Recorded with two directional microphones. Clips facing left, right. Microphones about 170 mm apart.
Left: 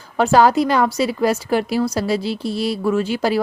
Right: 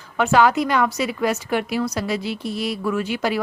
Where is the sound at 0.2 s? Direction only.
35° left (ahead or behind).